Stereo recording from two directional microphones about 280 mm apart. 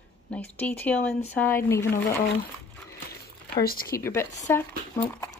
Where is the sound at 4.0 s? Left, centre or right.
Centre.